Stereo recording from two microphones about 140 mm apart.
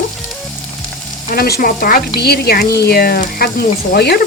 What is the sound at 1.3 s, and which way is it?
Speech, 85° left.